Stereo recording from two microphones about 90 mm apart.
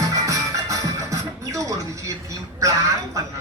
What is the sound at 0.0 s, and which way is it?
Music, 40° right (ahead or behind).